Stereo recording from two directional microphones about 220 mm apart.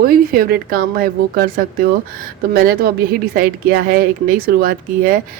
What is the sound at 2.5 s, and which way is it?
A woman's voice, 45° right (ahead or behind).